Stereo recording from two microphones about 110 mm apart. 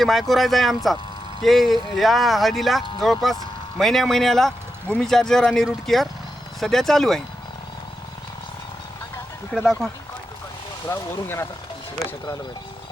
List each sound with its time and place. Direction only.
0.0 s speech: centre (ahead or behind)
9.5 s speech: 5° left (ahead or behind)
10.8 s speech: 20° left (ahead or behind)